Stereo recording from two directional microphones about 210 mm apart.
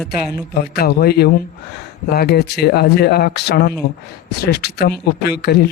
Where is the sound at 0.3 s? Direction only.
50° left (ahead or behind).